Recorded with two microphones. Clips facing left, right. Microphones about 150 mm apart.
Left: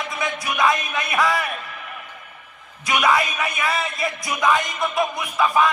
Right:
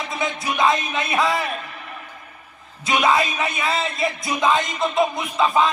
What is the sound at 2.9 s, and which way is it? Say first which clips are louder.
Music: right 1 dB; 25° right (ahead or behind).